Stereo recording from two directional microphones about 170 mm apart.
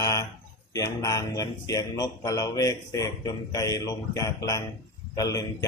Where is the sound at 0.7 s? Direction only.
20° left (ahead or behind).